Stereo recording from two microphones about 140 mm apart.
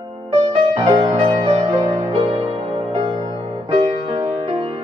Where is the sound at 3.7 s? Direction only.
40° right (ahead or behind).